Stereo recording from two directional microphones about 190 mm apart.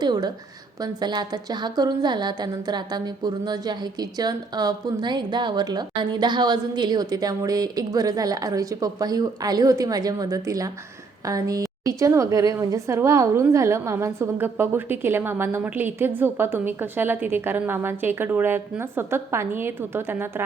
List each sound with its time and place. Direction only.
0.0 s a woman's voice: 20° right (ahead or behind)